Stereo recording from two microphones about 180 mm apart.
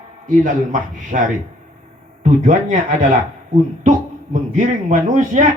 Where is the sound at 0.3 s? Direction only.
45° right (ahead or behind).